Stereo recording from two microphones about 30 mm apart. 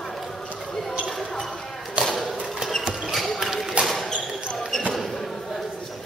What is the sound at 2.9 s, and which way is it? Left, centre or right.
Basketball bounce, centre.